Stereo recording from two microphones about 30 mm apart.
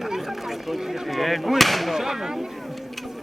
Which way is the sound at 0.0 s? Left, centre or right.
Centre.